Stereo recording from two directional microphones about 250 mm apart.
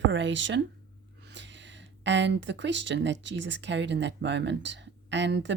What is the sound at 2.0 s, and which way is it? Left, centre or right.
Speech, right.